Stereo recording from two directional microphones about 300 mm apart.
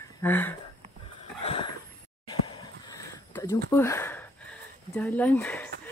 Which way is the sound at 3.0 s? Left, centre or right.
Centre.